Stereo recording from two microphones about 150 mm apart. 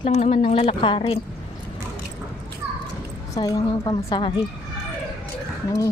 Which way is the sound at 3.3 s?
25° left (ahead or behind).